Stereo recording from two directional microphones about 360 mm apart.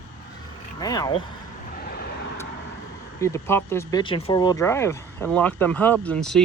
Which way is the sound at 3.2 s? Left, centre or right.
Centre.